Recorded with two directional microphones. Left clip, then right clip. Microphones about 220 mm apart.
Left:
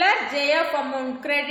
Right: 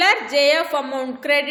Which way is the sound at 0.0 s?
45° right (ahead or behind).